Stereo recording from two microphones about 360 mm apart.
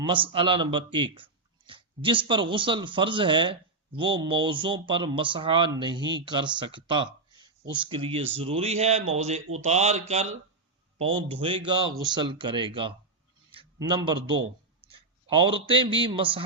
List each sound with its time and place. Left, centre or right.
0.0 s a man's voice: centre
13.5 s a sound: centre
15.3 s speech: centre